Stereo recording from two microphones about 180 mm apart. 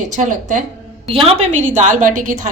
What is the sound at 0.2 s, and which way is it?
Speech, 45° right (ahead or behind).